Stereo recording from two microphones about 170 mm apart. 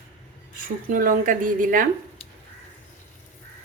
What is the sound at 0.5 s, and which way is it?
A woman's voice, 55° right (ahead or behind).